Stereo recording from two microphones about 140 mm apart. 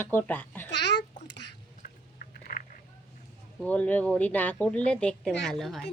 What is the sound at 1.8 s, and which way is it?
Chewing, 85° left.